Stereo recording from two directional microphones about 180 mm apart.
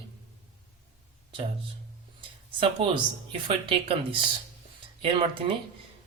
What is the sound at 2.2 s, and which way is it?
Speech, 30° right (ahead or behind).